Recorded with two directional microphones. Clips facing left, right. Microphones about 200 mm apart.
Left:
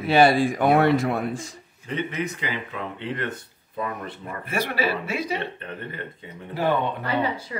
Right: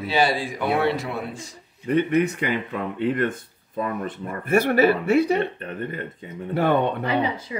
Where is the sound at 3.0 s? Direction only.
50° right (ahead or behind).